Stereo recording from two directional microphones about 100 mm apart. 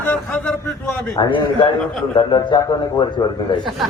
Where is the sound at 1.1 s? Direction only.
50° left (ahead or behind).